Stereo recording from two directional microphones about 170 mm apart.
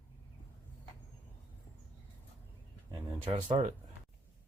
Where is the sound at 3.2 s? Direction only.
30° right (ahead or behind).